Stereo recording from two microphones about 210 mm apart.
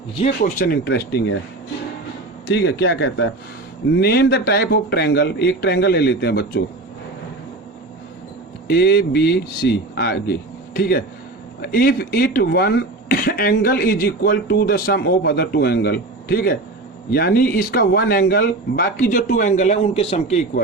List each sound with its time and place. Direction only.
0.4 s speech: 40° left (ahead or behind)
2.5 s speech: 55° left (ahead or behind)
8.7 s a man's voice: 50° left (ahead or behind); by 20.4 s 30° left (ahead or behind)